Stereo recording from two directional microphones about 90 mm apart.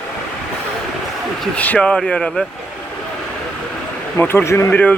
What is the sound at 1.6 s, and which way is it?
Speech, 15° left (ahead or behind).